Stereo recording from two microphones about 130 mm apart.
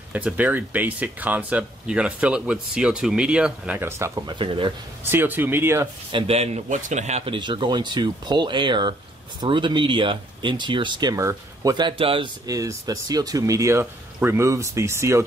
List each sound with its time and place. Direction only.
0.1 s speech: 10° right (ahead or behind)
4.0 s speech: 25° right (ahead or behind)
4.4 s speech: 40° right (ahead or behind)
5.0 s speech: 15° right (ahead or behind)
6.1 s a man's voice: 50° right (ahead or behind)
7.2 s speech: 40° right (ahead or behind)
12.4 s speech: 30° right (ahead or behind)